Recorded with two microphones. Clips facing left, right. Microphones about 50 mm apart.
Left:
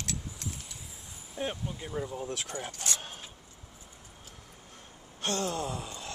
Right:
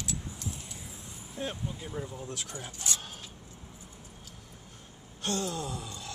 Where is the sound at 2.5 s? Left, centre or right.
Left.